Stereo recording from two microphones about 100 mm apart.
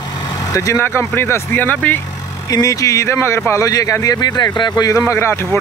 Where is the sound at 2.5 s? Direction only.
35° left (ahead or behind).